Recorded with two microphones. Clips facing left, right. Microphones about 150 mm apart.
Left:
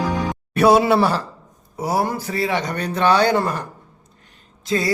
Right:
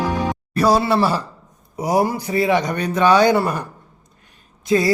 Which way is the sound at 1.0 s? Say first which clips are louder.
Even; 10° right (ahead or behind).